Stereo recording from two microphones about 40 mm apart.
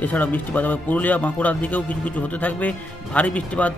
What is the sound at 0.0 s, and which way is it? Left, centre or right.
Speech, left.